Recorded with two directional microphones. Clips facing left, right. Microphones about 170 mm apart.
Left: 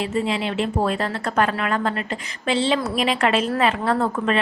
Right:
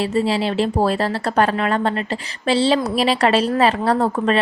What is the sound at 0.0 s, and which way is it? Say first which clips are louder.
A woman's voice: right 4 dB; 35° right (ahead or behind).